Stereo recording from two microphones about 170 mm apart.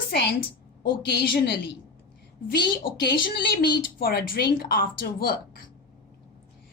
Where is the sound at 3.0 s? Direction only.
70° left (ahead or behind).